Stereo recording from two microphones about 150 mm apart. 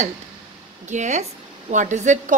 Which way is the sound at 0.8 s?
50° right (ahead or behind).